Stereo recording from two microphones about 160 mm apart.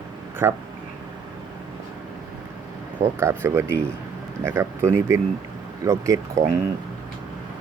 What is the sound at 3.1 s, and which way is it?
Speech, 15° right (ahead or behind).